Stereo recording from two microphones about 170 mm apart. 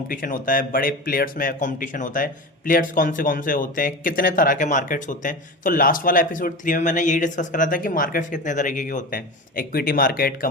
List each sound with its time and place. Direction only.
0.1 s speech: 55° left (ahead or behind)